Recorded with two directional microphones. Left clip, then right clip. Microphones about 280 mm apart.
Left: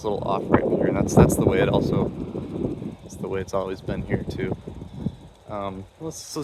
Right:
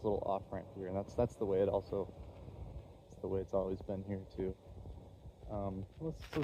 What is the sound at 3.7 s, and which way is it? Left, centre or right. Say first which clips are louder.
Speech: left 13 dB; centre.